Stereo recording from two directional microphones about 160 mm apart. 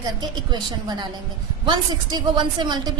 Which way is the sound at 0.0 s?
25° right (ahead or behind).